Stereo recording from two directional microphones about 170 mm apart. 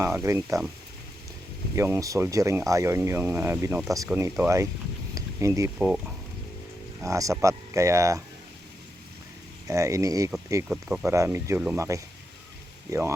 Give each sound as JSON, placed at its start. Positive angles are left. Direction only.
{"t": 0.0, "sound": "speech", "side_deg": -15}
{"t": 1.7, "sound": "speech", "side_deg": -15}
{"t": 7.0, "sound": "speech", "side_deg": -20}
{"t": 9.6, "sound": "speech", "side_deg": -20}
{"t": 10.7, "sound": "speech", "side_deg": -5}
{"t": 11.0, "sound": "speech", "side_deg": -15}